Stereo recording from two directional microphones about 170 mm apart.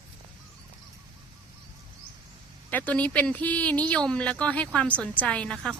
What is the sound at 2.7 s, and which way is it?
Speech, 10° left (ahead or behind).